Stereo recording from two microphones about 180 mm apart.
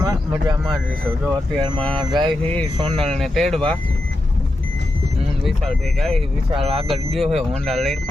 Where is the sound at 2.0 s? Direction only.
25° right (ahead or behind).